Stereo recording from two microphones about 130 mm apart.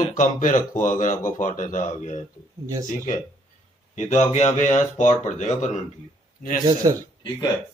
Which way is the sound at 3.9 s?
65° left (ahead or behind).